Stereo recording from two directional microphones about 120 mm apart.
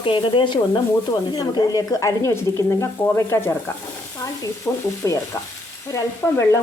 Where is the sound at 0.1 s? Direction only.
40° left (ahead or behind); by 2.4 s 25° left (ahead or behind).